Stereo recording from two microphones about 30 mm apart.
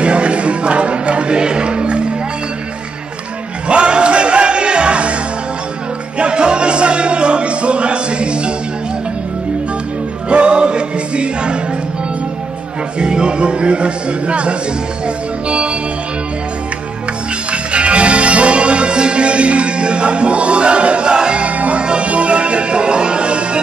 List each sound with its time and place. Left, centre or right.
0.0 s music: right
3.6 s music: right
6.1 s music: right
10.3 s music: right
13.0 s music: right
17.5 s music: right